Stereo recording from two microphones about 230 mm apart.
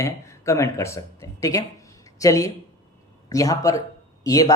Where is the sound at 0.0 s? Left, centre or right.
Centre.